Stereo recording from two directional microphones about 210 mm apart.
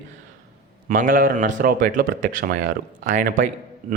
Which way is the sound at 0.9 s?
40° right (ahead or behind).